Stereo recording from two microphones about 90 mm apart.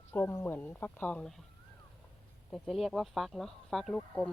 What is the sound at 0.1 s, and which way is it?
Speech, 25° left (ahead or behind).